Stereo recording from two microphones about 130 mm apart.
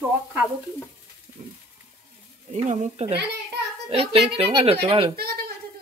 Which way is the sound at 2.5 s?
65° right (ahead or behind).